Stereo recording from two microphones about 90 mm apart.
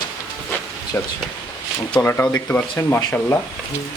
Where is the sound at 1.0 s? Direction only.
25° left (ahead or behind).